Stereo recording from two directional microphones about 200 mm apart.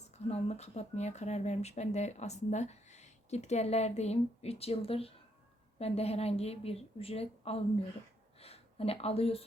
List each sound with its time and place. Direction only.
0.3 s speech: 30° left (ahead or behind)